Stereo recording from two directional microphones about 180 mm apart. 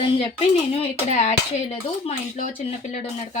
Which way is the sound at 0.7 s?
35° left (ahead or behind).